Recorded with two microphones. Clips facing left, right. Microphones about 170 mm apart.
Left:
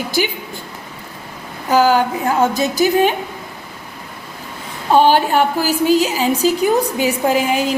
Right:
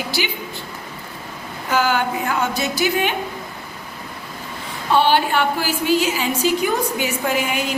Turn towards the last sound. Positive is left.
turn(degrees=35)  # may be behind; listen again after turning